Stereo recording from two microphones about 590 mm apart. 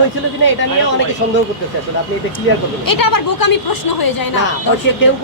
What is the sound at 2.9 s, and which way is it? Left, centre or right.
Speech, left.